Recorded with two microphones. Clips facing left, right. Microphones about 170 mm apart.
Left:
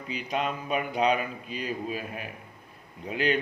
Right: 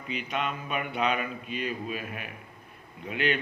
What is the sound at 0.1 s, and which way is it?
A man's voice, 35° left (ahead or behind).